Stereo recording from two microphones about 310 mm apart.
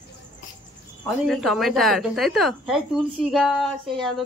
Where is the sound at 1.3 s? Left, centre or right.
Centre.